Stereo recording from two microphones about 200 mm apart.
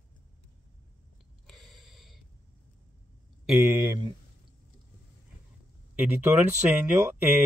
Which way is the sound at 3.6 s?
15° right (ahead or behind).